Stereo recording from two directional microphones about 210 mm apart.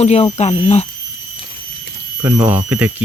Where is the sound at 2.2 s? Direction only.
10° right (ahead or behind).